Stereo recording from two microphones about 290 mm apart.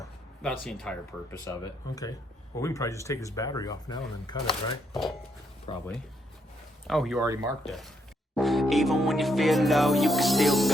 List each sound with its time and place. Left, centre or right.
0.0 s speech: centre
4.9 s music: centre
5.7 s speech: centre
6.8 s music: centre